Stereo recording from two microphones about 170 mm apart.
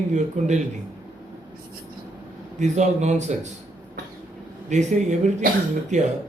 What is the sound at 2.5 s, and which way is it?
Speech, 45° right (ahead or behind).